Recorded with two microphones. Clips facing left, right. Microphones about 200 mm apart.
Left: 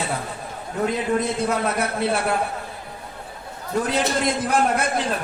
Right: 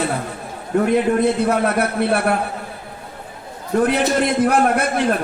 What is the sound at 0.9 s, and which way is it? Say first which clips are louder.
A man's voice: right 5 dB; 60° right (ahead or behind).